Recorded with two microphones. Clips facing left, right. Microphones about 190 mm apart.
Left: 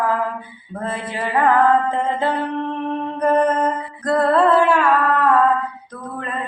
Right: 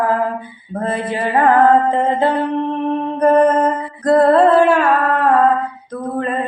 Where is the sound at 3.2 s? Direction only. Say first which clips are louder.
Right 5 dB; 40° right (ahead or behind).